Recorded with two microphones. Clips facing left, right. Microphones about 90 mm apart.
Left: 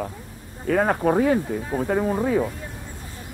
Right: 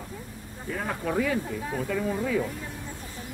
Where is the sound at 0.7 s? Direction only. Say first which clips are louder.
Left 11 dB; 65° left (ahead or behind).